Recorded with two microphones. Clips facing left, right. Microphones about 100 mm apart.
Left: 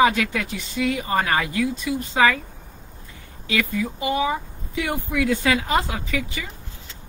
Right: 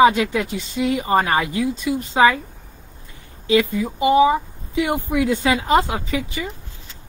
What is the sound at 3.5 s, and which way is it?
A woman's voice, 20° right (ahead or behind).